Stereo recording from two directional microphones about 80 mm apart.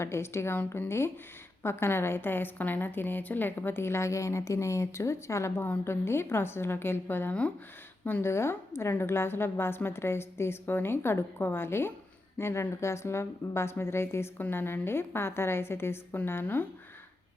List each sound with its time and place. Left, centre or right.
0.0 s a woman's voice: left
8.3 s a woman's voice: left